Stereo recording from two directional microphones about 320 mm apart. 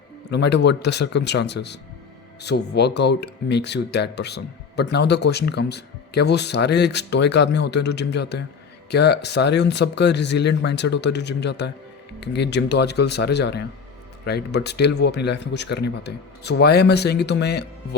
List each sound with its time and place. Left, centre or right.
0.3 s speech: left